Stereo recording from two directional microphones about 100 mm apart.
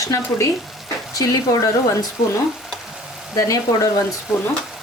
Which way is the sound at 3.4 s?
35° left (ahead or behind).